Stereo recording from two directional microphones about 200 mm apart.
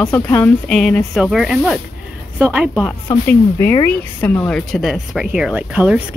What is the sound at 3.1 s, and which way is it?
Speech, 10° left (ahead or behind).